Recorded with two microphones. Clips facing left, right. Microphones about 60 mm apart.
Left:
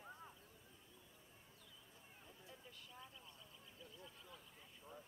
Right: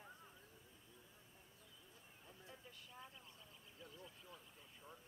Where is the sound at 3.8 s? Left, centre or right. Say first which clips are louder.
Right 2 dB; centre.